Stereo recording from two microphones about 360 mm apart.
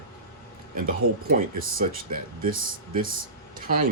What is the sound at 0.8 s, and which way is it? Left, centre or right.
Speech, right.